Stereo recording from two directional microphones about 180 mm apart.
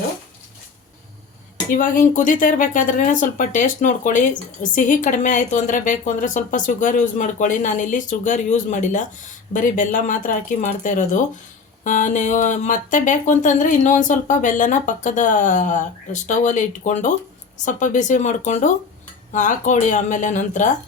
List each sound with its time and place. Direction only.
1.7 s speech: 50° left (ahead or behind)